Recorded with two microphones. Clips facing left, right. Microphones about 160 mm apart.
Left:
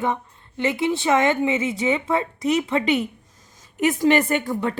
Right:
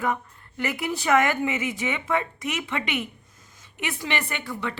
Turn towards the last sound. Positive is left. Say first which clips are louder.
# left 8 dB
turn(degrees=45)  # may be behind; listen again after turning